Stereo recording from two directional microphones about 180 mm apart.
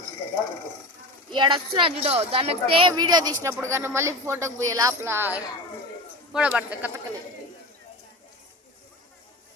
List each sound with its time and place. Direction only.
1.3 s speech: 25° right (ahead or behind); by 6.9 s 10° right (ahead or behind)